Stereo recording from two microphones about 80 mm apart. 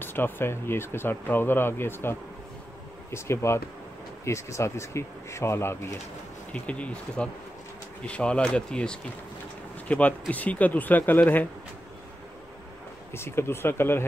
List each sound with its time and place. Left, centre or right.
0.0 s speech: left
6.5 s speech: centre
13.1 s speech: left